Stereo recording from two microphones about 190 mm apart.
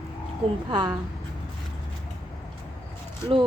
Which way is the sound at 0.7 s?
25° right (ahead or behind).